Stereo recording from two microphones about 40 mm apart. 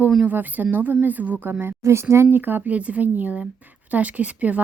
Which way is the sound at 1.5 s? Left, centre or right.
Right.